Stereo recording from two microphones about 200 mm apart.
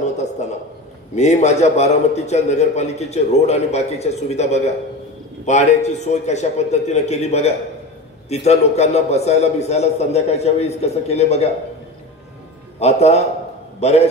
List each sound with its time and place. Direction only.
0.0 s a sound: 35° left (ahead or behind)
1.1 s a man's voice: 35° left (ahead or behind)
12.7 s a man's voice: 30° left (ahead or behind)